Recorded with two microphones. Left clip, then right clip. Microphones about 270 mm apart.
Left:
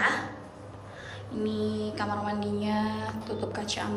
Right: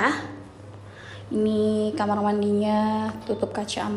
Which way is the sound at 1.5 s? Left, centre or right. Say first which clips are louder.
Right 8 dB; centre.